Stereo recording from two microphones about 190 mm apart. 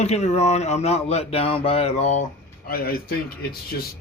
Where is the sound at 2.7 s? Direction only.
50° left (ahead or behind).